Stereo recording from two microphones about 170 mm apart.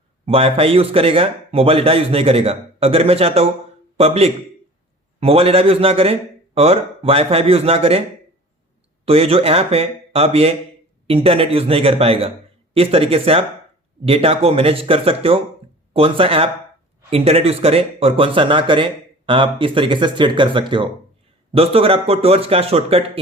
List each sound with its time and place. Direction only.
0.3 s a man's voice: 35° right (ahead or behind)
9.0 s speech: 35° right (ahead or behind)